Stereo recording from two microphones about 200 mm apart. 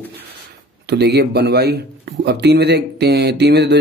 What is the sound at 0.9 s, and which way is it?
Speech, 55° right (ahead or behind).